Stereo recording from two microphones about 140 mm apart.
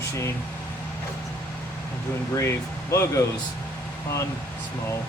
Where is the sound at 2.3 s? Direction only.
20° left (ahead or behind).